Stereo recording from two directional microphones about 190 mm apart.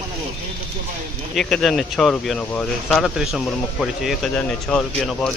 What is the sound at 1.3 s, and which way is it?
Speech, centre (ahead or behind).